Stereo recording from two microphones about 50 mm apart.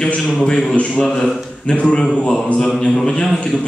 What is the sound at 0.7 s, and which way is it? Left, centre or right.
A man's voice, centre.